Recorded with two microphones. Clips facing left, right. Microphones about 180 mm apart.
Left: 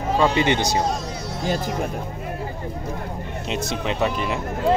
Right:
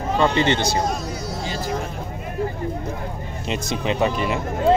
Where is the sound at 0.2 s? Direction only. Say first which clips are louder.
Right 1 dB; 10° left (ahead or behind).